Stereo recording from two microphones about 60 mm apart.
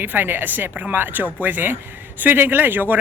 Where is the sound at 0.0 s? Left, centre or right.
Right.